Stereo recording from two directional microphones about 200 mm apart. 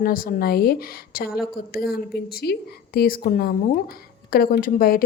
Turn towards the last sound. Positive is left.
turn(degrees=45)  # may be behind; listen again after turning